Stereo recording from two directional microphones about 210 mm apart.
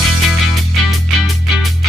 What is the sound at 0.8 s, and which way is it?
Music, centre (ahead or behind).